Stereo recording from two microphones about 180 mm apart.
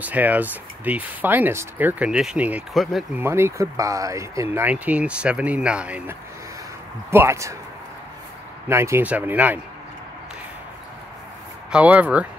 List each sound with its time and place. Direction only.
0.0 s speech: 10° right (ahead or behind)
3.2 s speech: 15° right (ahead or behind)
8.6 s speech: 15° right (ahead or behind)
11.7 s speech: 10° right (ahead or behind)